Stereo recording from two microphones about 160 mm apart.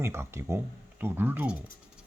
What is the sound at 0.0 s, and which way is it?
Speech, 15° right (ahead or behind).